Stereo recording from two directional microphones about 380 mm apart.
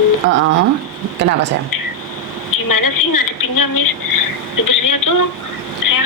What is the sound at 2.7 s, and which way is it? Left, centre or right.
A woman's voice, left.